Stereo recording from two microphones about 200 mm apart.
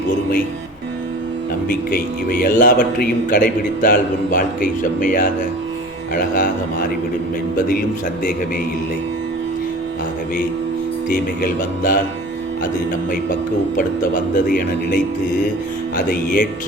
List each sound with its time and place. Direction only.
2.4 s a man's voice: 40° left (ahead or behind)
7.7 s a man's voice: 45° left (ahead or behind)
11.1 s a man's voice: 45° left (ahead or behind)
13.7 s speech: 40° left (ahead or behind)
16.0 s speech: 40° left (ahead or behind)